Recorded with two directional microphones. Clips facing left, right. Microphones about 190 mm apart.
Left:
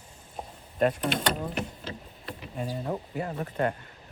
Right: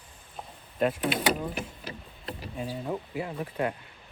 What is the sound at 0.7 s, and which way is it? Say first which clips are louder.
Speech: left 1 dB; 5° right (ahead or behind).